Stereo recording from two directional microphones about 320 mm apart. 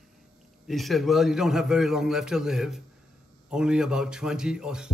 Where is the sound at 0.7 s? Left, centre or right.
Centre.